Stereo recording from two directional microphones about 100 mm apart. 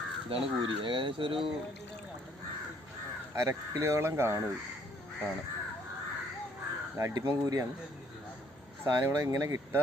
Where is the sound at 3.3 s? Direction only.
30° right (ahead or behind).